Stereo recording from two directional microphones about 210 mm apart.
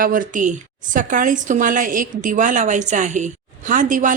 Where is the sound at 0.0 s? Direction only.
40° right (ahead or behind).